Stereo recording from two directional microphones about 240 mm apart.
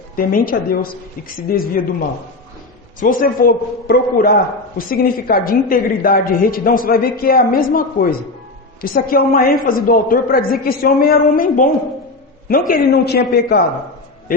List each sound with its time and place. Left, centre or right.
0.2 s a woman's voice: left
3.0 s a woman's voice: left